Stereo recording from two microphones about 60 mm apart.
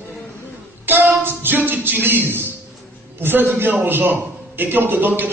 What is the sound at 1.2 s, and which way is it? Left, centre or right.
A man's voice, right.